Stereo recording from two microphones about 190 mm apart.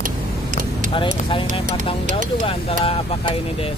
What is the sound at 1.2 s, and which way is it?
Speech, 25° left (ahead or behind).